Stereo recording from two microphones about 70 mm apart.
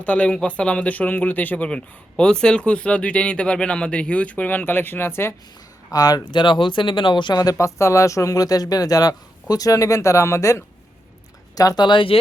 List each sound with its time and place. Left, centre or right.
0.0 s speech: centre; by 5.3 s left
5.9 s speech: left
7.6 s speech: left
11.5 s speech: left